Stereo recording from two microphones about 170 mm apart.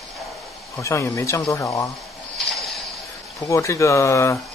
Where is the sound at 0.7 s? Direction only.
15° left (ahead or behind).